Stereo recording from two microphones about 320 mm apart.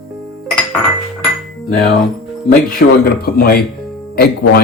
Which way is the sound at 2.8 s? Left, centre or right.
Left.